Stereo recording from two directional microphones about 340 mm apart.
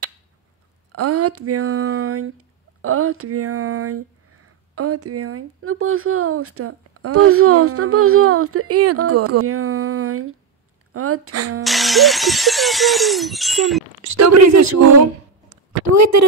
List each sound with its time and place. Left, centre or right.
0.9 s speech: right
11.6 s speech: centre
14.1 s speech: right
15.5 s a sound: right